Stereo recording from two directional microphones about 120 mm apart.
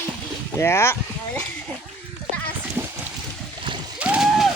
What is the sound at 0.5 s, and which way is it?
Speech, 20° left (ahead or behind).